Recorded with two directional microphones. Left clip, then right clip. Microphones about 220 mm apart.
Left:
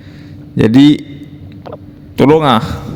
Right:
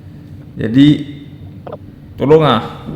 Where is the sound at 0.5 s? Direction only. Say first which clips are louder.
Left 3 dB; 45° left (ahead or behind).